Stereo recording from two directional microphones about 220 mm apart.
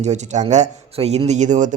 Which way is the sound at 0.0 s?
30° right (ahead or behind).